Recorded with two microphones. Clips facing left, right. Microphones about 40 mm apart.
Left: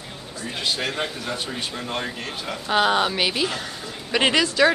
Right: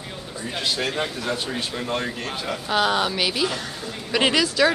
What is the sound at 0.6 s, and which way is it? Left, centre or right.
Speech, centre.